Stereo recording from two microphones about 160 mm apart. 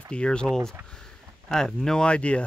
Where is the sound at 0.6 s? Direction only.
15° right (ahead or behind).